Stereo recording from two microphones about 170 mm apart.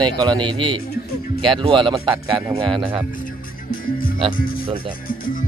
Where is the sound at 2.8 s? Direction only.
10° right (ahead or behind).